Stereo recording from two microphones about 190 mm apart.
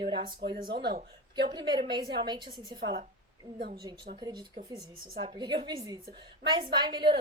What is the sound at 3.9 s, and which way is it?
A woman's voice, 25° right (ahead or behind).